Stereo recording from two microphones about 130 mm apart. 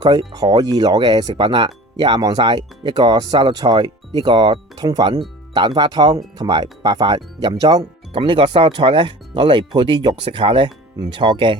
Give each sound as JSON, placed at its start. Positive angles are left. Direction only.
{"t": 0.0, "sound": "speech", "side_deg": -35}
{"t": 8.1, "sound": "speech", "side_deg": -45}